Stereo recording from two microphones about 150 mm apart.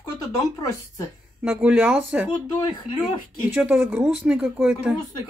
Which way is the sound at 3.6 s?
5° right (ahead or behind).